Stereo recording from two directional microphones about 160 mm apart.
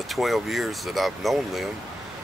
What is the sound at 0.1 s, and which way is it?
Speech, centre (ahead or behind).